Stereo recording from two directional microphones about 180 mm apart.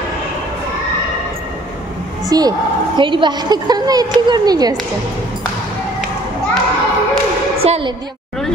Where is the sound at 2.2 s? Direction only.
20° right (ahead or behind).